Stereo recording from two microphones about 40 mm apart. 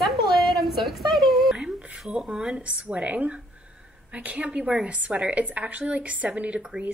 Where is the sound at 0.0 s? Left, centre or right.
Centre.